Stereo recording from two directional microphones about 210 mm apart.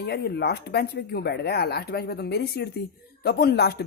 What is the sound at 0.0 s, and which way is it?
Speech, 50° left (ahead or behind).